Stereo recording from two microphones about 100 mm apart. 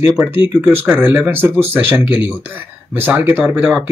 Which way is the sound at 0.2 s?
20° right (ahead or behind).